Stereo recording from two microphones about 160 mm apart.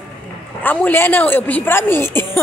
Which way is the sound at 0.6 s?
10° left (ahead or behind).